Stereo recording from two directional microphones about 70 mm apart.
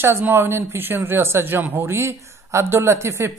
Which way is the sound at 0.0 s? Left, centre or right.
Right.